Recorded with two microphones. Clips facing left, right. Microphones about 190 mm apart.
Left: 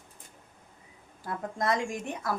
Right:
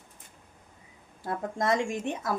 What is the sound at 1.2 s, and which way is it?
A woman's voice, 25° right (ahead or behind).